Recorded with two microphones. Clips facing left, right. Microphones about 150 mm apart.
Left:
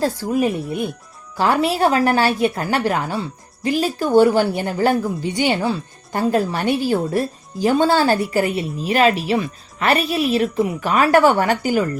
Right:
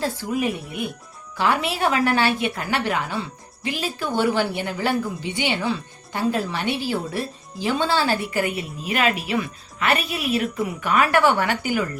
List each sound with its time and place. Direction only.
0.0 s a woman's voice: 40° left (ahead or behind)